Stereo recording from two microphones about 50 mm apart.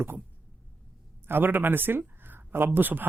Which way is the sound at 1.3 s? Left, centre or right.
Right.